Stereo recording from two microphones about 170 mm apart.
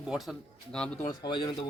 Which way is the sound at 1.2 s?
25° left (ahead or behind).